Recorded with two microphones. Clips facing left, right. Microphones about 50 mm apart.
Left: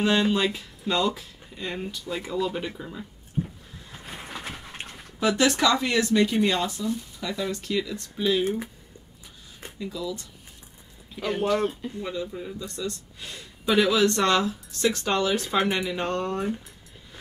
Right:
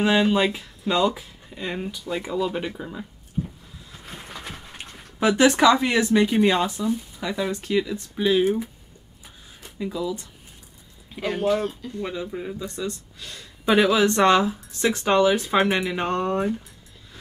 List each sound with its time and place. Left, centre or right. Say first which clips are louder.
0.0 s speech: right 3 dB; centre
5.3 s speech: right 5 dB; centre
9.8 s speech: right 5 dB; right